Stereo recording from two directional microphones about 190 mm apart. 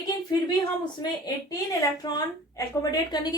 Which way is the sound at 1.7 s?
20° left (ahead or behind).